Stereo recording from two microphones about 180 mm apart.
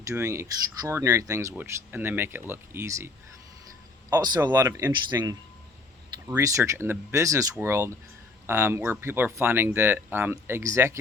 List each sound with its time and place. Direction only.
0.0 s speech: 15° right (ahead or behind)
4.4 s speech: 20° right (ahead or behind)